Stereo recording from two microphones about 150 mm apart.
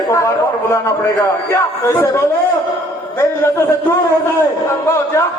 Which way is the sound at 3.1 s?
15° left (ahead or behind).